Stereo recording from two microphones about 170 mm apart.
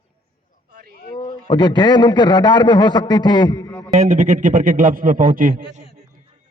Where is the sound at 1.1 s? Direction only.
25° left (ahead or behind).